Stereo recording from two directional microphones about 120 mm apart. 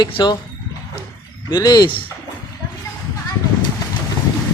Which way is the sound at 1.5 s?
35° left (ahead or behind).